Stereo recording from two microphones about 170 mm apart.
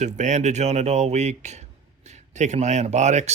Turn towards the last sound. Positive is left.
turn(degrees=-45)  # may be behind; listen again after turning